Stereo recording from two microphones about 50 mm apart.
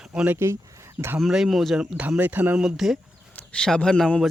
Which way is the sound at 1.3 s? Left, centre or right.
Centre.